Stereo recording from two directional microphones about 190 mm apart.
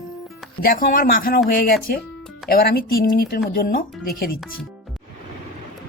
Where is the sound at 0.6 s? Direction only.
45° left (ahead or behind).